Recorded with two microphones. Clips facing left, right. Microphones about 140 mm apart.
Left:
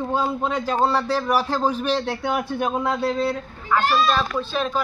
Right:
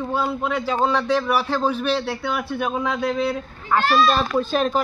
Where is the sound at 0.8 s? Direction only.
10° left (ahead or behind).